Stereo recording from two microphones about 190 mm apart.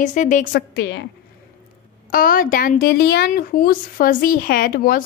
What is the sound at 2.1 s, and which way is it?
A woman's voice, 50° left (ahead or behind).